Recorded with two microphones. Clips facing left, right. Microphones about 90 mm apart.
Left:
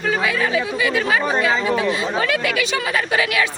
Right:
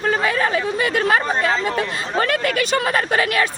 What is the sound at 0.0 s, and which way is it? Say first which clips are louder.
Speech: right 1 dB; 40° right (ahead or behind).